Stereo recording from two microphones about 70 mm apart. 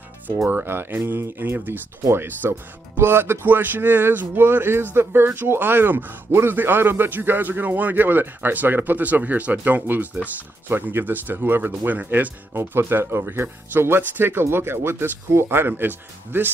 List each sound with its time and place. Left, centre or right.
0.5 s speech: right
12.5 s speech: right